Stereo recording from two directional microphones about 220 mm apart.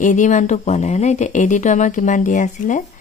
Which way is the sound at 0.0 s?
35° left (ahead or behind).